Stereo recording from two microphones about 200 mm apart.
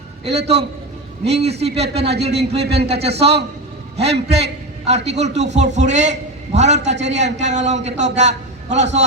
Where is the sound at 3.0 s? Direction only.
30° right (ahead or behind).